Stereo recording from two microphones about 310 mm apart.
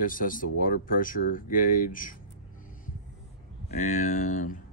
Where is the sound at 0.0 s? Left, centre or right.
Left.